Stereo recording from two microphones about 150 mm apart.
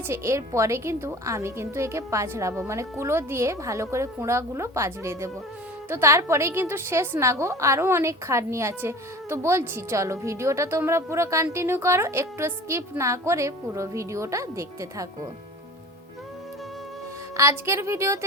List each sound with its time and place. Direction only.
0.1 s a woman's voice: 20° right (ahead or behind)
17.3 s a woman's voice: 20° right (ahead or behind)